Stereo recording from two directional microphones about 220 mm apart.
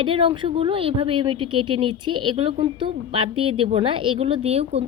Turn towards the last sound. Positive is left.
turn(degrees=-30)  # may be behind; listen again after turning